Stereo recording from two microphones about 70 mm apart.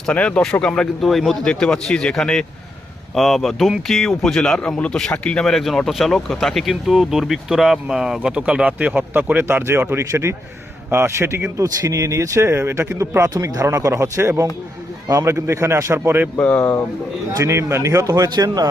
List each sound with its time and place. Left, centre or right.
0.1 s speech: centre; by 11.4 s right
11.5 s speech: right
16.4 s speech: centre
17.3 s speech: right
18.1 s speech: right